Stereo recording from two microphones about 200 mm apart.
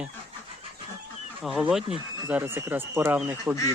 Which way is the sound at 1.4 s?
Centre (ahead or behind).